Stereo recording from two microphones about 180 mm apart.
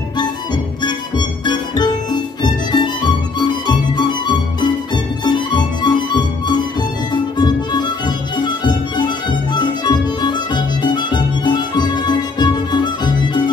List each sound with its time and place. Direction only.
0.8 s music: 25° left (ahead or behind)